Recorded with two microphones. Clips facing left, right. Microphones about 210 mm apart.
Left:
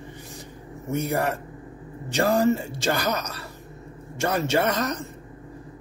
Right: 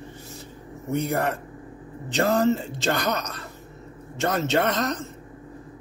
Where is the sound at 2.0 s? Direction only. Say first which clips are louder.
Even; 10° left (ahead or behind).